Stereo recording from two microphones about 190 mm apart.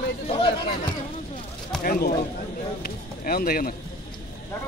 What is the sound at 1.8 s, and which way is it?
Speech, 50° left (ahead or behind).